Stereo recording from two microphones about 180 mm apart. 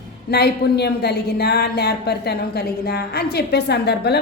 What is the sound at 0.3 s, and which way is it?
A woman's voice, 65° left (ahead or behind).